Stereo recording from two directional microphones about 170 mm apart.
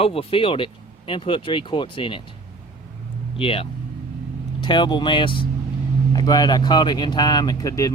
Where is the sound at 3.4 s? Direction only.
35° left (ahead or behind).